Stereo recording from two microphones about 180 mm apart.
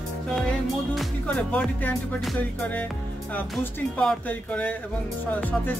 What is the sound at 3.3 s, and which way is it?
Music, 10° left (ahead or behind).